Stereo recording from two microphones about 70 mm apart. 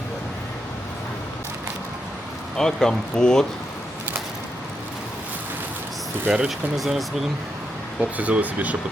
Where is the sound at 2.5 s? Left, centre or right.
Centre.